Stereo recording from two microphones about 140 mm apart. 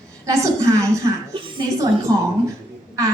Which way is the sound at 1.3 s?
35° right (ahead or behind).